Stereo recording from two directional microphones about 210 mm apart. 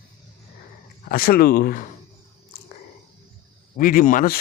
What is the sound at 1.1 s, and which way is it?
Speech, 45° left (ahead or behind).